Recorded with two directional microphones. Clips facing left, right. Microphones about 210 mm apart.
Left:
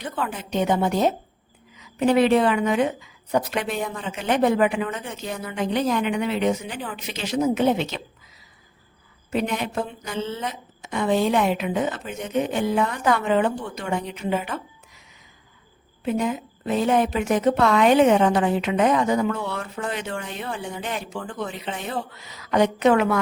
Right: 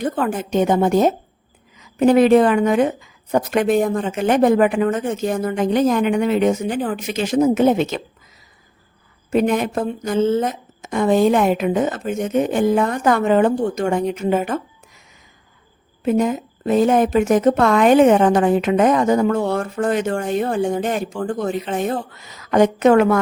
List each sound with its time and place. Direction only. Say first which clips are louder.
0.0 s speech: right 8 dB; 45° right (ahead or behind)
9.3 s speech: right 7 dB; 45° right (ahead or behind)
16.0 s speech: right 6 dB; 45° right (ahead or behind)